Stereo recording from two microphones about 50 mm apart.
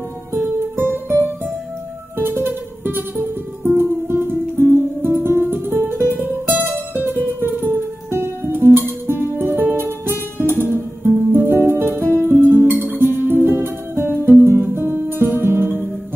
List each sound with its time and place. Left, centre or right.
0.7 s music: right
10.6 s music: right
14.4 s music: right